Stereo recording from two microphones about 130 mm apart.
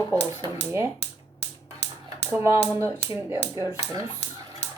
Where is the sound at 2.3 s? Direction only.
15° right (ahead or behind).